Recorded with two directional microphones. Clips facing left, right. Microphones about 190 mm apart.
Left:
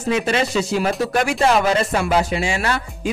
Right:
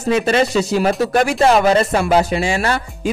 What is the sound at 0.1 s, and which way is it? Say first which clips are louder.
Speech: right 4 dB; 40° right (ahead or behind).